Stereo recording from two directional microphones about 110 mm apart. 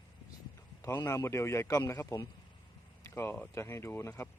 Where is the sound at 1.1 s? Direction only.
25° left (ahead or behind).